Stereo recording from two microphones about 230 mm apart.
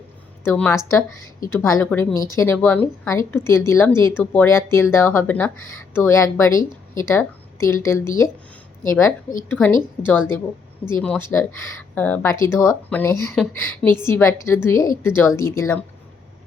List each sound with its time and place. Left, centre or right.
0.4 s a woman's voice: centre
5.5 s speech: left
5.9 s a woman's voice: centre
11.0 s a woman's voice: centre